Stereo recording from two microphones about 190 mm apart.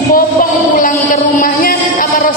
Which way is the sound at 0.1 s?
45° left (ahead or behind).